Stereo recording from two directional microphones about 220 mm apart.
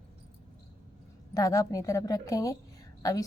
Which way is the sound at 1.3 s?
15° left (ahead or behind).